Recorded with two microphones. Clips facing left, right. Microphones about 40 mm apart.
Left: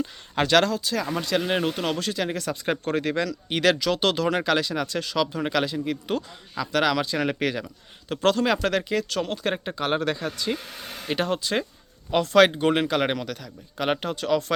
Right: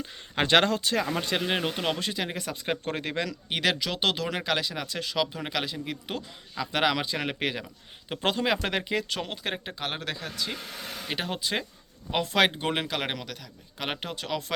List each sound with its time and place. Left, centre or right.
0.4 s speech: right
0.7 s speech: right
1.4 s speech: centre
6.7 s speech: centre